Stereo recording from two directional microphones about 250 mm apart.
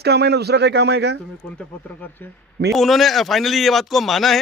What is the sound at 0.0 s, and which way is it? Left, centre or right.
Speech, right.